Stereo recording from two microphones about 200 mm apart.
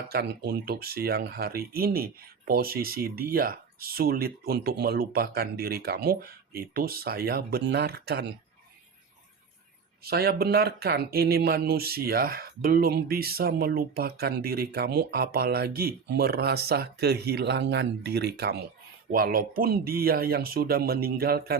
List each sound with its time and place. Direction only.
0.1 s speech: 50° right (ahead or behind)
10.0 s speech: 50° right (ahead or behind)